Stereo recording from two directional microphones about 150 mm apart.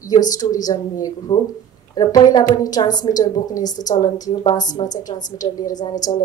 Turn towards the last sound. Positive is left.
turn(degrees=25)  # may be behind; listen again after turning